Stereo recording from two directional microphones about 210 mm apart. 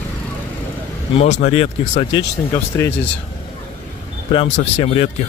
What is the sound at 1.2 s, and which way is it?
Speech, 30° left (ahead or behind).